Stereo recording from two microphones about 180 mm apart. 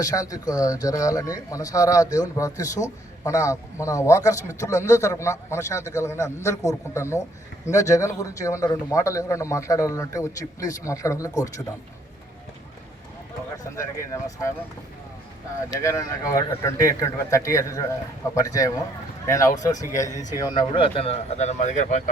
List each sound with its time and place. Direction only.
0.0 s a man's voice: 20° left (ahead or behind)
13.7 s a man's voice: 15° left (ahead or behind)
15.8 s a man's voice: 15° left (ahead or behind)
20.1 s speech: 45° left (ahead or behind)
20.3 s speech: 25° left (ahead or behind); by 22.1 s 45° left (ahead or behind)